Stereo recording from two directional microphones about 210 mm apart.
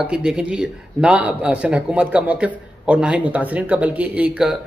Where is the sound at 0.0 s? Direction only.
5° right (ahead or behind).